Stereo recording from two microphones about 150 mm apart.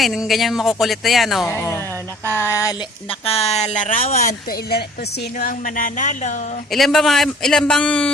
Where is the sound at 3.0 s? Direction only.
40° left (ahead or behind).